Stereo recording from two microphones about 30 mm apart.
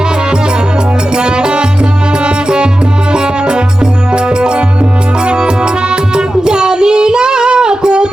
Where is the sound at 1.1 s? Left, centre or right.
Right.